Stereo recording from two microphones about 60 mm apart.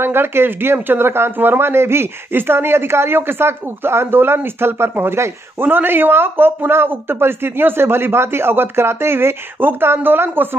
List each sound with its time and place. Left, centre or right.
0.0 s speech: right